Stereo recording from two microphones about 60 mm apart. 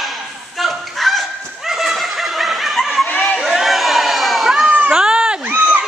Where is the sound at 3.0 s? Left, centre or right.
Left.